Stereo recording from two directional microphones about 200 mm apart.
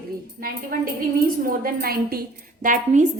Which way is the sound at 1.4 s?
45° right (ahead or behind).